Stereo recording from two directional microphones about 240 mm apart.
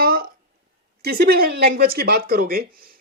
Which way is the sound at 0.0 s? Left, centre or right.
Right.